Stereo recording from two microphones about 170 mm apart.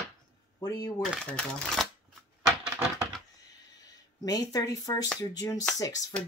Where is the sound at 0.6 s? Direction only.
20° left (ahead or behind).